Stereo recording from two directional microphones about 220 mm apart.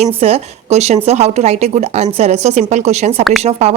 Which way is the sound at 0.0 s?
25° right (ahead or behind).